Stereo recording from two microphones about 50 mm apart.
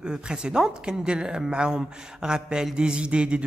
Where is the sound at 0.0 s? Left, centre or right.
Centre.